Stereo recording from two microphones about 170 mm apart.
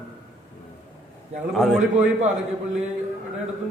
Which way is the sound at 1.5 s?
Centre (ahead or behind).